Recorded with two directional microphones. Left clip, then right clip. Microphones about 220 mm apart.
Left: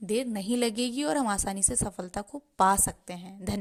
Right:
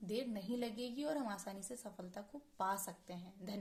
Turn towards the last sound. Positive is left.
turn(degrees=40)  # may be behind; listen again after turning